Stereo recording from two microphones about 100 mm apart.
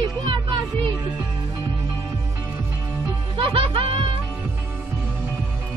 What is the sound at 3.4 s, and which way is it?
Speech, 65° right (ahead or behind).